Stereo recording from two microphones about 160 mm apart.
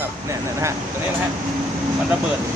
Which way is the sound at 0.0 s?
15° right (ahead or behind).